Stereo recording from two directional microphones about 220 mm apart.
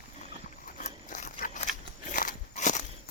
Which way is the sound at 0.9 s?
35° left (ahead or behind).